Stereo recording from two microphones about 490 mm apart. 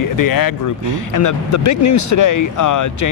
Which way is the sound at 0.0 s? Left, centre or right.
Left.